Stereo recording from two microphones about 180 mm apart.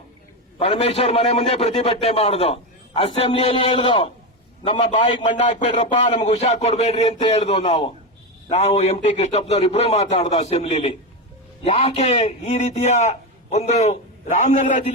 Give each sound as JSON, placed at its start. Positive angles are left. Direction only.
{"t": 0.6, "sound": "a man's voice", "side_deg": 35}